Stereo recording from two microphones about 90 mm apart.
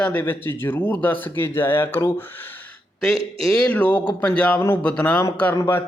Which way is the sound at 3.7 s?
15° left (ahead or behind).